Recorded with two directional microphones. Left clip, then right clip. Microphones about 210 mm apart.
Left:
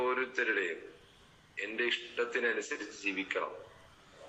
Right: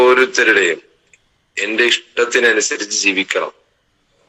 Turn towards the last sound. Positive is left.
turn(degrees=-55)  # may be behind; listen again after turning